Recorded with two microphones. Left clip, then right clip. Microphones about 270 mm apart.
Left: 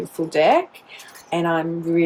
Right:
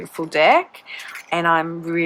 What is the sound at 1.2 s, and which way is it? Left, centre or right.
Speech, centre.